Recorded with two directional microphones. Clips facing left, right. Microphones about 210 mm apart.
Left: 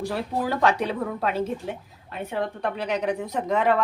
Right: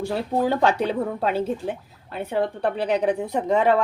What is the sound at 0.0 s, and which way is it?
A woman's voice, 25° right (ahead or behind).